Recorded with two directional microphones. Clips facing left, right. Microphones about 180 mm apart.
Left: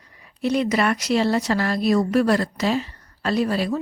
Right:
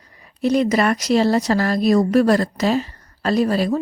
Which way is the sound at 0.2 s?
40° right (ahead or behind).